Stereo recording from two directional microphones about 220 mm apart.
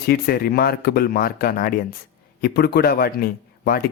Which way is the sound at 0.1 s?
45° left (ahead or behind).